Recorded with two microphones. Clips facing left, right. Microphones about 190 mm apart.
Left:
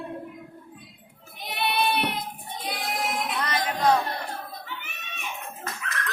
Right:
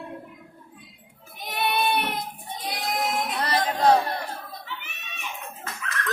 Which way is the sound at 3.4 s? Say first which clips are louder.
Right 3 dB; 30° right (ahead or behind).